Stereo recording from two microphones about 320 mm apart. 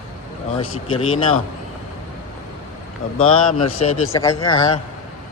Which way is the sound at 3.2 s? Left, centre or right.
Left.